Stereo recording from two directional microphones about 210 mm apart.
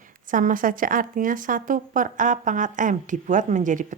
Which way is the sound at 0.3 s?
40° right (ahead or behind).